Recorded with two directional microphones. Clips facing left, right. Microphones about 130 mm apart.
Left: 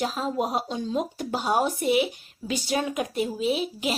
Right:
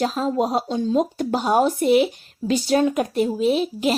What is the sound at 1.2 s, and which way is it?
A woman's voice, 50° right (ahead or behind).